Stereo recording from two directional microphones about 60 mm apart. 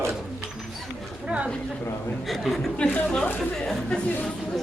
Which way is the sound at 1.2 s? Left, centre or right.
Centre.